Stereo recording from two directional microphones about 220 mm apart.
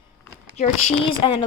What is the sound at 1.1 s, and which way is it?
Speech, 20° left (ahead or behind).